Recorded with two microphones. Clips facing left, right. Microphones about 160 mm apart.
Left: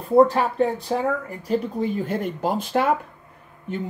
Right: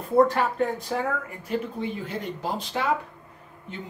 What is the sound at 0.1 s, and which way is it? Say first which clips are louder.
Speech: left 4 dB; 30° left (ahead or behind).